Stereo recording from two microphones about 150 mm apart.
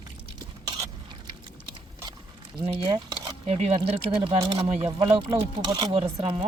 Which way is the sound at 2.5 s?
35° right (ahead or behind).